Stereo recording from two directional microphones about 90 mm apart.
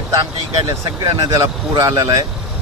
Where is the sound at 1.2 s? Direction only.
40° right (ahead or behind).